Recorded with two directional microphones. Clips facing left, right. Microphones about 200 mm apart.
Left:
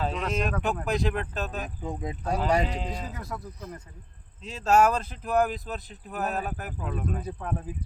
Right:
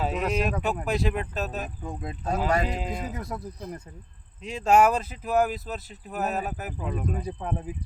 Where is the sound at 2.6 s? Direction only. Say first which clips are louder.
Right 2 dB; 5° right (ahead or behind).